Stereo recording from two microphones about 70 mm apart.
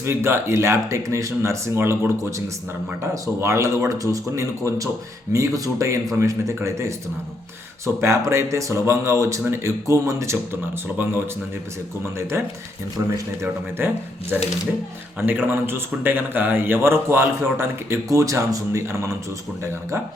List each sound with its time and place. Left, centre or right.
0.0 s a man's voice: right
8.0 s speech: right
10.9 s a man's voice: right
12.0 s a man's voice: right
13.4 s a man's voice: right